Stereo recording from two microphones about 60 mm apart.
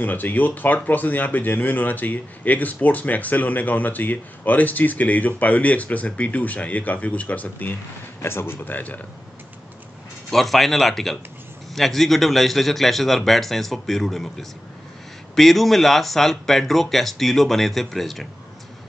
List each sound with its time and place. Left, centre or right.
0.0 s speech: left
8.2 s speech: left
10.3 s speech: centre